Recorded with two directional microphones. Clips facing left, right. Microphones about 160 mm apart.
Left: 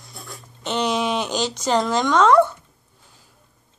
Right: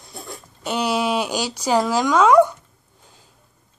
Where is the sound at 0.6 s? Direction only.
10° right (ahead or behind).